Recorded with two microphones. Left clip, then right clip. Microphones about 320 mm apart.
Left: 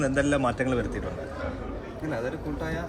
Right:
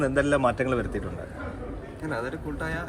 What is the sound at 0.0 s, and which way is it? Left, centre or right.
Speech, centre.